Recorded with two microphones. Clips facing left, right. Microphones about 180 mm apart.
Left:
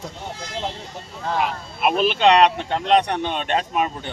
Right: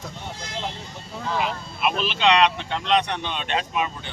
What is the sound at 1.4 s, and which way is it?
Speech, 50° left (ahead or behind).